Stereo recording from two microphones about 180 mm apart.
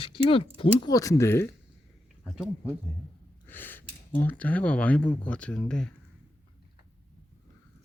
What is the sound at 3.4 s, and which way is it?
Speech, 10° left (ahead or behind).